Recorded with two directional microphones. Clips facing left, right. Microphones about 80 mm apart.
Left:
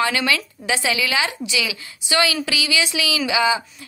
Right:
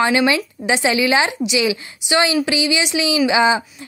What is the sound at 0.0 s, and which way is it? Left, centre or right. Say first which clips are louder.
A woman's voice: right 5 dB; right.